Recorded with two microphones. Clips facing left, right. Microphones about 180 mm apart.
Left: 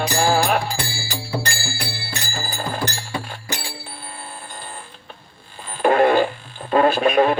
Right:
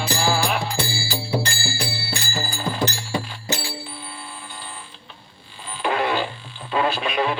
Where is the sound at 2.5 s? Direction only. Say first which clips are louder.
Left 3 dB; 50° left (ahead or behind).